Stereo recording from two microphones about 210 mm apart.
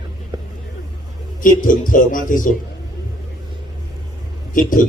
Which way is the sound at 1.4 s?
40° left (ahead or behind).